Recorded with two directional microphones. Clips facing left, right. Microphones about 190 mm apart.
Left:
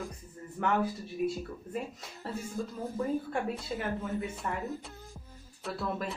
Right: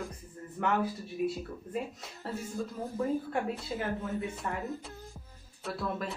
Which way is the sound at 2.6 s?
Centre (ahead or behind).